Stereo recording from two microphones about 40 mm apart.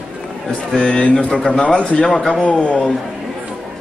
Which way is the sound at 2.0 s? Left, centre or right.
Centre.